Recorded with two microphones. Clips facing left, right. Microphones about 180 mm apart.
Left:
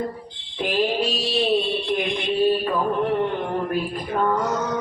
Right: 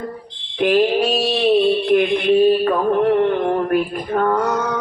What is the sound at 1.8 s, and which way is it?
Music, 65° right (ahead or behind).